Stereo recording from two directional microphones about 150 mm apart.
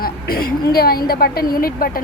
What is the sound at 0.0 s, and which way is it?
A woman's voice, 80° left.